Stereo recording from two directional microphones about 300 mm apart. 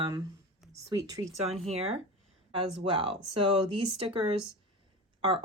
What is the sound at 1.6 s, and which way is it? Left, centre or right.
Speech, right.